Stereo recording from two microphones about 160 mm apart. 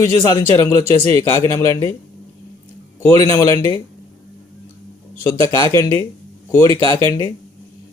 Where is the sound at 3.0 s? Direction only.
15° left (ahead or behind).